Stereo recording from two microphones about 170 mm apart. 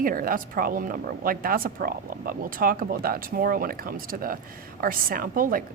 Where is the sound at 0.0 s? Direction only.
55° right (ahead or behind).